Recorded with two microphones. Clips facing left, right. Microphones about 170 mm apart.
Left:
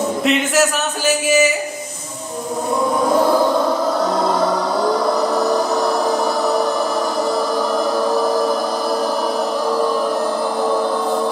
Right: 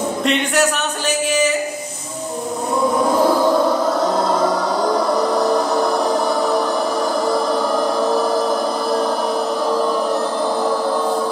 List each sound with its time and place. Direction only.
0.2 s speech: 5° left (ahead or behind)